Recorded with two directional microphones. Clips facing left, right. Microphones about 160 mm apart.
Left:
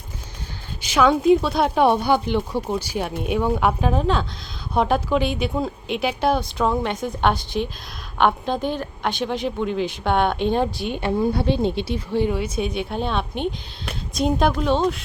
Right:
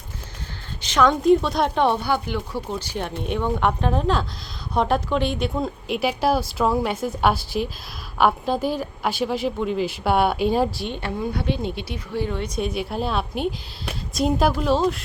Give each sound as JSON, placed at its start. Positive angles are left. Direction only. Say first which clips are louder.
{"t": 0.8, "sound": "a woman's voice", "louder": "left 1 dB", "side_deg": 10}
{"t": 2.7, "sound": "speech", "louder": "left 3 dB", "side_deg": 10}
{"t": 11.3, "sound": "speech", "louder": "left 5 dB", "side_deg": 30}
{"t": 12.3, "sound": "speech", "louder": "left 2 dB", "side_deg": 5}